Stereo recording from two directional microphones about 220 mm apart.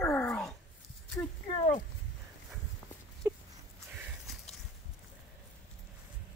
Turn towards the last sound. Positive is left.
turn(degrees=0)  # may be behind; listen again after turning